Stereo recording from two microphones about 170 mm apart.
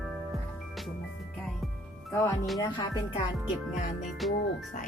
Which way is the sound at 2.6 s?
25° left (ahead or behind).